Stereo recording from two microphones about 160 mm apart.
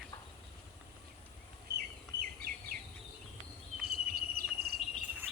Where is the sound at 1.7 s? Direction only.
80° right.